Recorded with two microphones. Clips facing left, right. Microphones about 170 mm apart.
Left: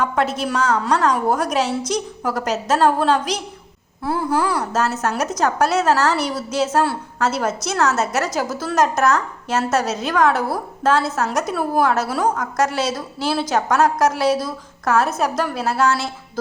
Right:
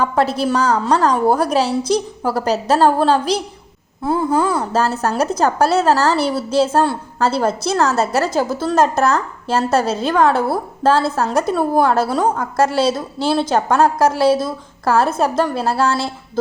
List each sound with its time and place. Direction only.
0.0 s a woman's voice: 35° right (ahead or behind)